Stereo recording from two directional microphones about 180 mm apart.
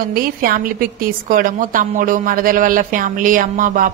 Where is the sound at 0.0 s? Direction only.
55° right (ahead or behind).